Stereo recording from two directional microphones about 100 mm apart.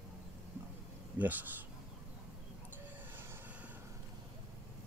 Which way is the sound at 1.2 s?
15° right (ahead or behind).